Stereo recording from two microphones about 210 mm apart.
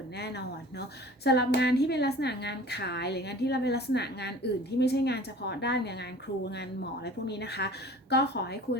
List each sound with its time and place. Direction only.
0.2 s a woman's voice: 50° left (ahead or behind)